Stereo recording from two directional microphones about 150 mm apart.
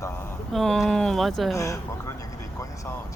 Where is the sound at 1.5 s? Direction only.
20° left (ahead or behind).